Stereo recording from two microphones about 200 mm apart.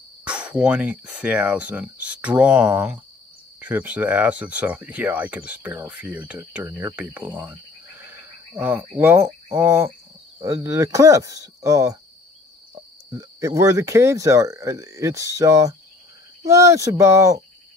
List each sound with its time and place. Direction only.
0.2 s speech: 5° right (ahead or behind)
8.5 s speech: 10° right (ahead or behind)
13.1 s speech: 15° right (ahead or behind)